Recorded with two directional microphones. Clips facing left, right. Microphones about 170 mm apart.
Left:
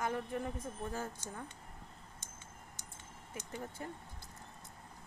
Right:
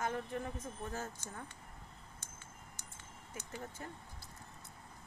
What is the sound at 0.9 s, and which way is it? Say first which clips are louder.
Speech: left 2 dB; 15° left (ahead or behind).